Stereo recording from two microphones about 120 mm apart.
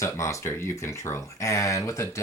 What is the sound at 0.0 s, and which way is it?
Speech, 25° left (ahead or behind).